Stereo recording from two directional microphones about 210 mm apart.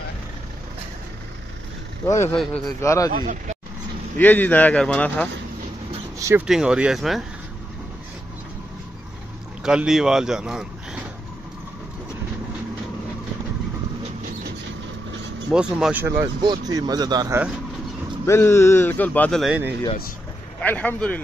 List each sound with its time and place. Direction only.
2.0 s speech: 15° left (ahead or behind)
2.3 s speech: centre (ahead or behind)
2.8 s speech: 15° left (ahead or behind)
4.2 s speech: 10° left (ahead or behind)
6.1 s speech: 15° right (ahead or behind)
6.4 s speech: 5° right (ahead or behind)
9.6 s speech: 5° right (ahead or behind)
15.5 s speech: 5° right (ahead or behind)
18.2 s speech: 10° left (ahead or behind); by 19.7 s 5° right (ahead or behind)
20.6 s speech: 5° left (ahead or behind)